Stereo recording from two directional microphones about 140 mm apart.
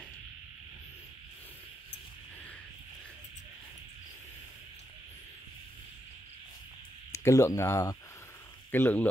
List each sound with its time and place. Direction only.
7.1 s speech: 20° left (ahead or behind)